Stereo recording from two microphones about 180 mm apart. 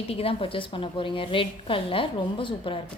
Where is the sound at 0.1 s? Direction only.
30° left (ahead or behind).